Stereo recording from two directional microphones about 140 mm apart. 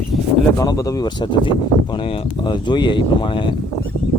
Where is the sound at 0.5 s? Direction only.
25° left (ahead or behind).